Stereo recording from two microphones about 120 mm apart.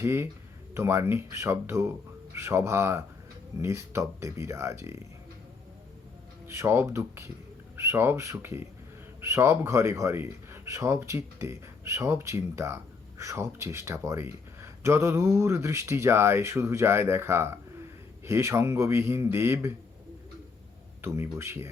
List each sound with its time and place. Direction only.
0.0 s speech: 20° right (ahead or behind)
6.5 s speech: 25° right (ahead or behind)
21.0 s speech: 20° right (ahead or behind)